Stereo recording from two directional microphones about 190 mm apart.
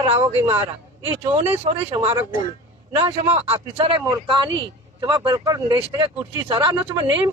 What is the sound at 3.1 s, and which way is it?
Speech, 30° right (ahead or behind).